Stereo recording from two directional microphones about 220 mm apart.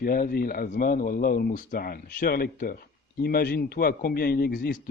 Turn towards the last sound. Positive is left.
turn(degrees=45)  # may be behind; listen again after turning